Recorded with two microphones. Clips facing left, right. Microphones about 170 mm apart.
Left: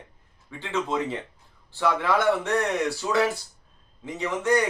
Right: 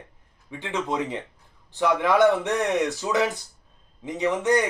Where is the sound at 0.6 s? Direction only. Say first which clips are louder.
Even; 15° right (ahead or behind).